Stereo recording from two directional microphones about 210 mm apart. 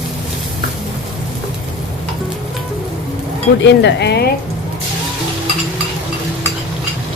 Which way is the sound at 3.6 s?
55° left (ahead or behind).